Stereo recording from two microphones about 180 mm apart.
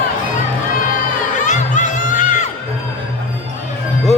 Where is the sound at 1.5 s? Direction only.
45° left (ahead or behind).